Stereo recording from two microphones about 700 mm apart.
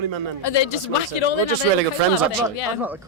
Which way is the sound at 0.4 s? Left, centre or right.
Left.